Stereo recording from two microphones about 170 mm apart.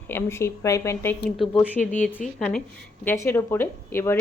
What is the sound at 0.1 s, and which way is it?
Speech, 15° left (ahead or behind).